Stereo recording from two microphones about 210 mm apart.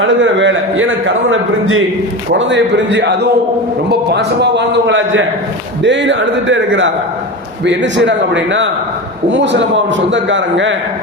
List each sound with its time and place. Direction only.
0.0 s a man's voice: 60° right (ahead or behind)